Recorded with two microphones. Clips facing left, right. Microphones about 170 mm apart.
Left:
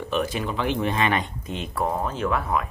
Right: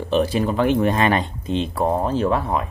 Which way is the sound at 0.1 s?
35° right (ahead or behind).